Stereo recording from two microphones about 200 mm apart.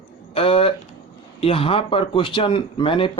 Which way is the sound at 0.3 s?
30° left (ahead or behind).